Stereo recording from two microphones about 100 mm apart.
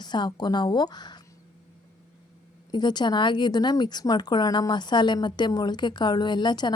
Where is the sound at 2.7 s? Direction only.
45° left (ahead or behind).